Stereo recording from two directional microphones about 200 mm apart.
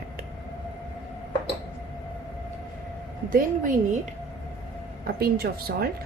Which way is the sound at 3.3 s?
40° right (ahead or behind).